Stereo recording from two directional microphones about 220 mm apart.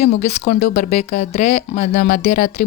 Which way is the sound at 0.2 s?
30° left (ahead or behind).